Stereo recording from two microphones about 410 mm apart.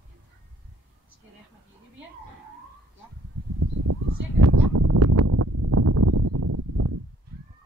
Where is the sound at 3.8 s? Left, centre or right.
Right.